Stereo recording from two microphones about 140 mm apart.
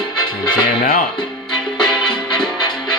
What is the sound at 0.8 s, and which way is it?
Speech, 90° left.